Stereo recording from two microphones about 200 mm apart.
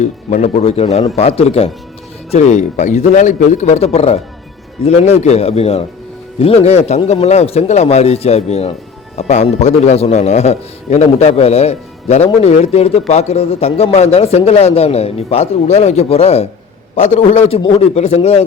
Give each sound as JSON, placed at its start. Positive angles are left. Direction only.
{"t": 0.0, "sound": "a man's voice", "side_deg": 40}